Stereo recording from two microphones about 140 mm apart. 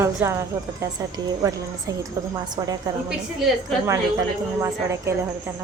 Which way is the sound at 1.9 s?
25° right (ahead or behind).